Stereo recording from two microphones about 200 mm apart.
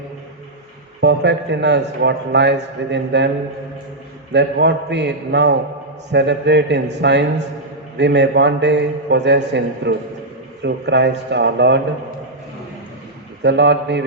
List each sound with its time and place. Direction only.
1.0 s a man's voice: 60° right (ahead or behind)
4.3 s a man's voice: 60° right (ahead or behind)
13.4 s a man's voice: 60° right (ahead or behind)